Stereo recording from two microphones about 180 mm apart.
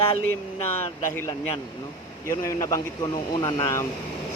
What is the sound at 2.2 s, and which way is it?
A man's voice, 15° left (ahead or behind).